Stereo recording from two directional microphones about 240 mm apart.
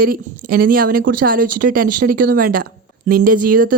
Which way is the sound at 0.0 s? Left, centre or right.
Right.